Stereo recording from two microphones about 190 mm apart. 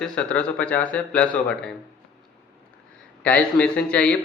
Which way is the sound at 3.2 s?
5° left (ahead or behind).